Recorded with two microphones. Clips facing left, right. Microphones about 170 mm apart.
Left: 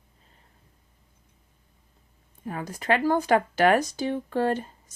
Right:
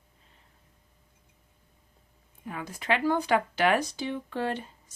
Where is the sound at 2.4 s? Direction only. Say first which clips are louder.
Left 4 dB; 40° left (ahead or behind).